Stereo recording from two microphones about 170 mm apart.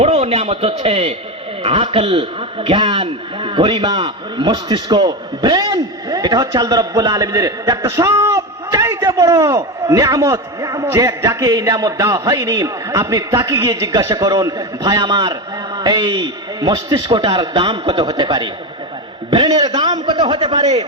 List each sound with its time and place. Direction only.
0.0 s a man's voice: 35° right (ahead or behind)